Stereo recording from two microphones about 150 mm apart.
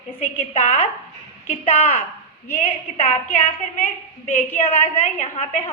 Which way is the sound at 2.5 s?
40° left (ahead or behind).